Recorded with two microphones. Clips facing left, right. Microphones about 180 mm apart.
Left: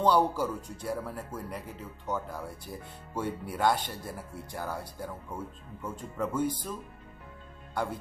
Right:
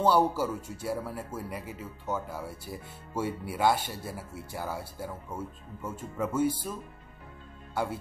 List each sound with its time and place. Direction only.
0.0 s speech: 5° right (ahead or behind)
7.7 s speech: 5° right (ahead or behind)